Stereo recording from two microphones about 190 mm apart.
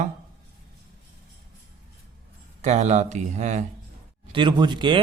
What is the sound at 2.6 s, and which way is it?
A man's voice, 35° right (ahead or behind).